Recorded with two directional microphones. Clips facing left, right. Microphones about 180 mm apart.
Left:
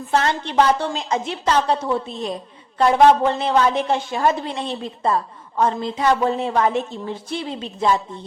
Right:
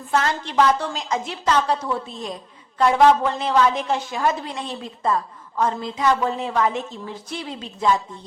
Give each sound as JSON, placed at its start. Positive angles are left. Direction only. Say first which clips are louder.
{"t": 0.1, "sound": "a woman's voice", "louder": "left 2 dB", "side_deg": 30}